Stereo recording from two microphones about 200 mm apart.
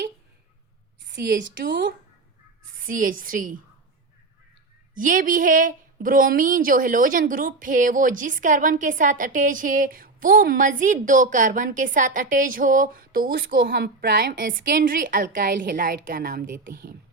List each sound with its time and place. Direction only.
1.0 s a woman's voice: 55° right (ahead or behind)
2.7 s a woman's voice: 45° right (ahead or behind)
4.9 s a woman's voice: 40° right (ahead or behind)